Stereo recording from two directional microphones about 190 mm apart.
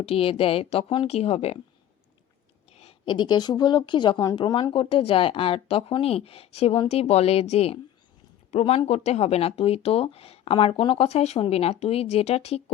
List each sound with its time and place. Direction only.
0.0 s speech: 30° left (ahead or behind)
2.7 s a woman's voice: 30° left (ahead or behind)